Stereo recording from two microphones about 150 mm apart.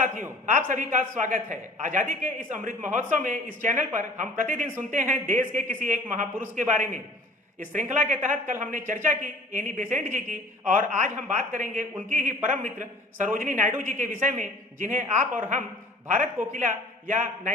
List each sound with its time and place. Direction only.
0.0 s a man's voice: 60° right (ahead or behind)